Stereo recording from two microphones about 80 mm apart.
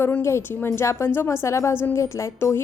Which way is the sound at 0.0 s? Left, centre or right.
Left.